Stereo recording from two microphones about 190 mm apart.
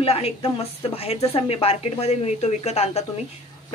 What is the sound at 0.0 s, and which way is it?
A woman's voice, 30° left (ahead or behind).